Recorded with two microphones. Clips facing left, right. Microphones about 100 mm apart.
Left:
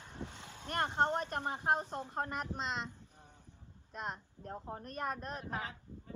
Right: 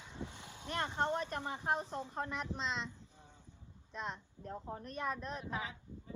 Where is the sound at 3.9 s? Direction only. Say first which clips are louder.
Left 1 dB; 45° left (ahead or behind).